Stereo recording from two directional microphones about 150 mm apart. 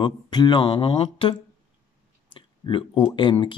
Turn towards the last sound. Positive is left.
turn(degrees=35)  # may be behind; listen again after turning